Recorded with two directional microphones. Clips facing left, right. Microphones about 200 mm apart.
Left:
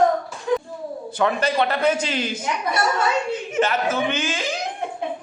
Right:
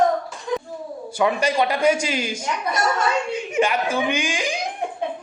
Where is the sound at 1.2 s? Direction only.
10° right (ahead or behind).